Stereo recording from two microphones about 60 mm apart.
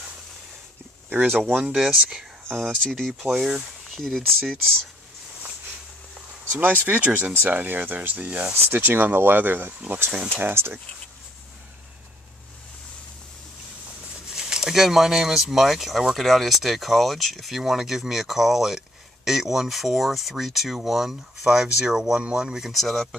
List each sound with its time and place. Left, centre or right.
1.1 s speech: right
1.6 s speech: centre
2.4 s speech: centre
6.6 s speech: right
14.3 s speech: centre
22.7 s speech: centre